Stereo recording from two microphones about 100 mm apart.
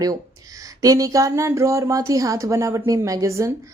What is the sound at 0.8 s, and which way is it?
Speech, 35° right (ahead or behind).